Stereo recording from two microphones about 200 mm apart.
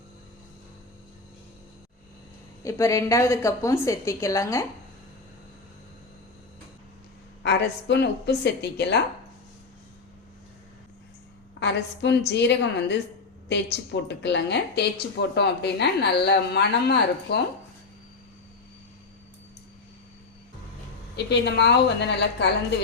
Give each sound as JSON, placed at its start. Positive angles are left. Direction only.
{"t": 2.6, "sound": "a woman's voice", "side_deg": 15}
{"t": 7.4, "sound": "a woman's voice", "side_deg": 55}
{"t": 11.6, "sound": "a woman's voice", "side_deg": 60}
{"t": 21.2, "sound": "a woman's voice", "side_deg": 55}